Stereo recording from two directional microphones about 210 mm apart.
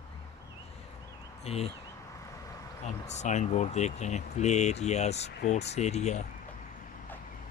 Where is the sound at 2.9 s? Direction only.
35° left (ahead or behind).